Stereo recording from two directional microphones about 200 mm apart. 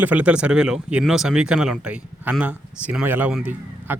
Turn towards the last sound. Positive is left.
turn(degrees=-5)  # may be behind; listen again after turning